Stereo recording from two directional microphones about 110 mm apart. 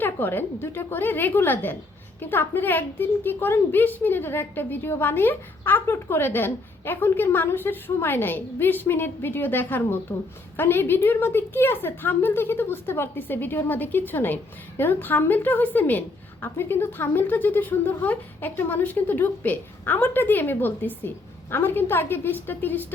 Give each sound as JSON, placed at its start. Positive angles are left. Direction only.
{"t": 0.0, "sound": "a woman's voice", "side_deg": 20}